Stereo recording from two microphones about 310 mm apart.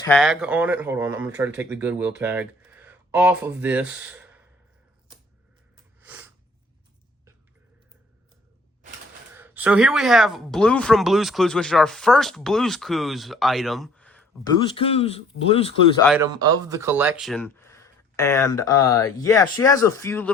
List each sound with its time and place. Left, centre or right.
0.0 s speech: centre
5.7 s sniff: centre
9.3 s speech: centre
14.8 s speech: centre
16.0 s speech: centre